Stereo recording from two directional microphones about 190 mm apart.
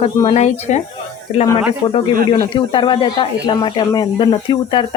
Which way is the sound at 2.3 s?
25° left (ahead or behind).